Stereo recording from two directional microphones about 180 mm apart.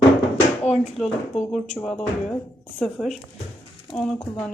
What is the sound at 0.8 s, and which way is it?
A woman's voice, 5° left (ahead or behind).